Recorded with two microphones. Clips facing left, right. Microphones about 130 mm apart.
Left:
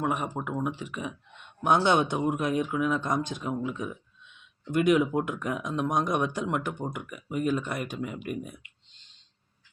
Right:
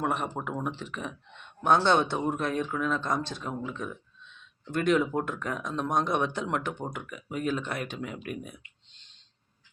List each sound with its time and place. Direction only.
0.0 s a man's voice: 5° left (ahead or behind)